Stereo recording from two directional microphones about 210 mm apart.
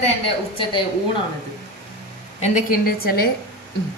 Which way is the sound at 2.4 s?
40° left (ahead or behind).